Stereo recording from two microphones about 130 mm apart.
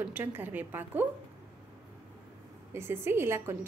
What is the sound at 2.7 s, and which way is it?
Speech, 20° right (ahead or behind).